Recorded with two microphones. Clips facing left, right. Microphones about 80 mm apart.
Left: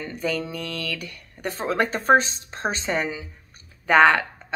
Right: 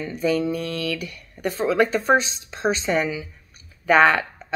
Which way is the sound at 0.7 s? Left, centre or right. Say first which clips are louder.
Right 4 dB; left.